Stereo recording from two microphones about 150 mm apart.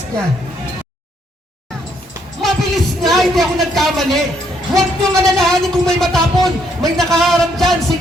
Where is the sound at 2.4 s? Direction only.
Centre (ahead or behind).